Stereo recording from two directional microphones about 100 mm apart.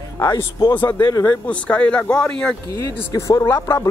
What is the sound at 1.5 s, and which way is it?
Speech, 10° left (ahead or behind).